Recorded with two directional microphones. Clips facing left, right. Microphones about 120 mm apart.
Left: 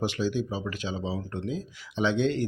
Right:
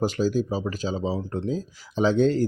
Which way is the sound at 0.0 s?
40° right (ahead or behind).